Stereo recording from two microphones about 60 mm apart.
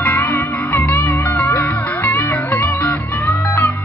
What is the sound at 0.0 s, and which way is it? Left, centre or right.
Music, left.